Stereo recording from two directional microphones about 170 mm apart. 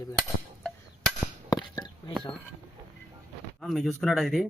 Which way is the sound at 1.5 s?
25° left (ahead or behind).